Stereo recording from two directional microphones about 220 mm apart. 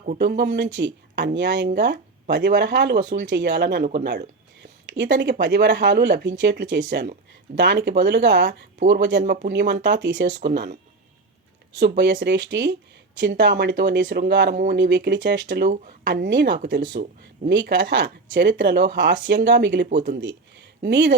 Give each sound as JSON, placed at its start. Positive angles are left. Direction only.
{"t": 0.0, "sound": "speech", "side_deg": -40}
{"t": 11.8, "sound": "speech", "side_deg": -55}
{"t": 14.5, "sound": "speech", "side_deg": -35}
{"t": 14.8, "sound": "speech", "side_deg": -55}
{"t": 17.5, "sound": "speech", "side_deg": -55}
{"t": 20.2, "sound": "a sound", "side_deg": -55}